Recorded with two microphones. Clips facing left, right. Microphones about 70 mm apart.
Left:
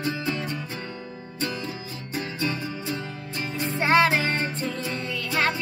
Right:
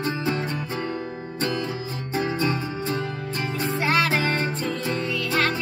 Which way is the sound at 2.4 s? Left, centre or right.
Right.